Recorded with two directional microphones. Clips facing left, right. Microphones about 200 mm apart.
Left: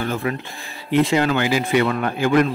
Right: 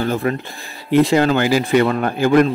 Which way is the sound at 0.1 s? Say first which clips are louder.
Right 4 dB; 40° right (ahead or behind).